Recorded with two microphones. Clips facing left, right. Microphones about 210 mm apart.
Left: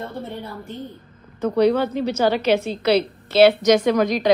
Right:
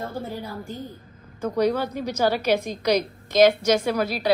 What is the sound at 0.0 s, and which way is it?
A woman's voice, centre (ahead or behind).